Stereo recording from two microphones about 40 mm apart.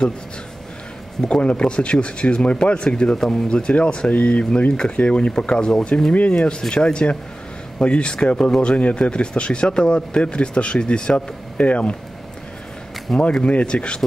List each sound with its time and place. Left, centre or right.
1.4 s a man's voice: left
3.2 s speech: centre
3.4 s a man's voice: left
4.1 s a man's voice: left
11.1 s speech: left
13.1 s speech: centre
13.5 s a man's voice: left